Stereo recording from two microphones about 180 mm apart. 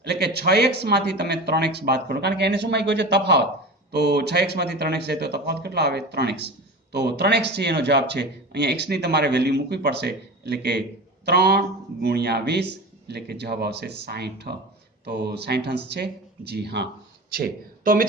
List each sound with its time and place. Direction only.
0.0 s speech: 65° right (ahead or behind)
17.3 s speech: 55° right (ahead or behind)